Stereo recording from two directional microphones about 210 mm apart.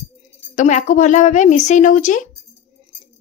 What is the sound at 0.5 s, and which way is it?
Speech, 35° left (ahead or behind).